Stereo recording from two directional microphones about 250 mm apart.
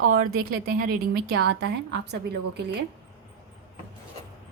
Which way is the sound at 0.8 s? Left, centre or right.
Right.